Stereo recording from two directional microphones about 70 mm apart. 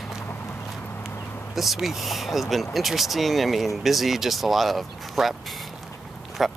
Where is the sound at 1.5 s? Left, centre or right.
Centre.